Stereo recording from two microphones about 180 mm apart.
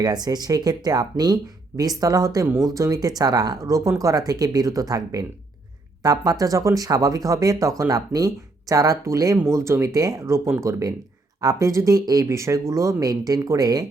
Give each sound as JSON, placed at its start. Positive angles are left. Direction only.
{"t": 0.0, "sound": "speech", "side_deg": -20}